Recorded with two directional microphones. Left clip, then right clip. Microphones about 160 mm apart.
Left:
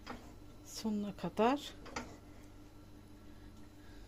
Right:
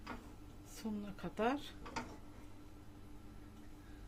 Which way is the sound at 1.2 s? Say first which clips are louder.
Left 5 dB; 60° left (ahead or behind).